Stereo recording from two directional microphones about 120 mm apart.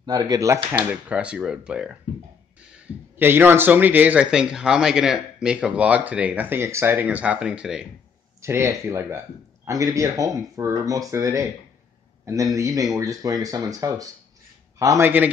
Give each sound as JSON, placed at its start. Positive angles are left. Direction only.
{"t": 0.0, "sound": "speech", "side_deg": -35}
{"t": 1.0, "sound": "a man's voice", "side_deg": -10}
{"t": 3.2, "sound": "a man's voice", "side_deg": -15}
{"t": 8.4, "sound": "a man's voice", "side_deg": -20}